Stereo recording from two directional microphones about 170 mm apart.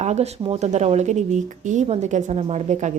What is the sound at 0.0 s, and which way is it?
Speech, 40° right (ahead or behind).